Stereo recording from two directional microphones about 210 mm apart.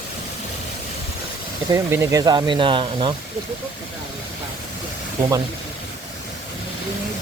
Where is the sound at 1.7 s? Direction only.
15° right (ahead or behind).